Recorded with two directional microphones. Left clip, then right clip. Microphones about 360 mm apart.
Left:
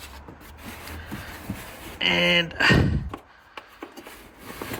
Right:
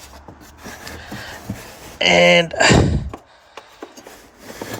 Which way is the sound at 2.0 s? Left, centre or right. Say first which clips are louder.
Right 9 dB; centre.